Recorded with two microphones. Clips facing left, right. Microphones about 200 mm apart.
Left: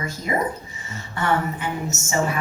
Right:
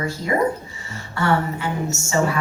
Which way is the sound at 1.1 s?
20° left (ahead or behind).